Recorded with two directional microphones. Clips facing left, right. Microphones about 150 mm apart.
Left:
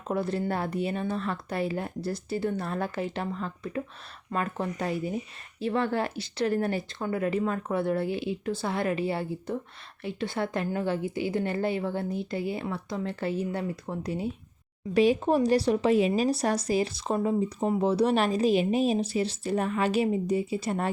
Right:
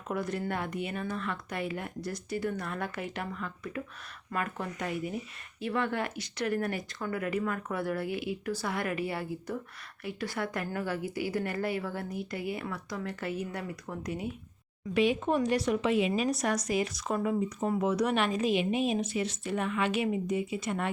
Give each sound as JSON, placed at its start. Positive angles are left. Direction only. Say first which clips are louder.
{"t": 0.1, "sound": "a woman's voice", "louder": "left 4 dB", "side_deg": 30}